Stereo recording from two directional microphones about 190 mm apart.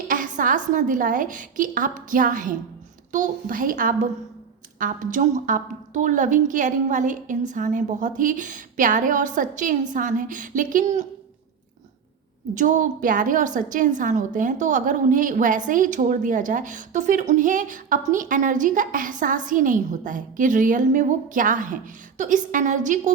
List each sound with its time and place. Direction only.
0.1 s a woman's voice: 45° right (ahead or behind)
12.5 s a woman's voice: 45° right (ahead or behind)